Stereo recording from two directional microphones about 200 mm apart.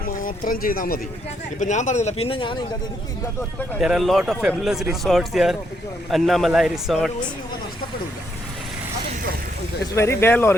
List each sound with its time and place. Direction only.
0.2 s speech: 45° left (ahead or behind); by 2.6 s 25° left (ahead or behind)
3.8 s speech: centre (ahead or behind)
9.9 s speech: 15° left (ahead or behind)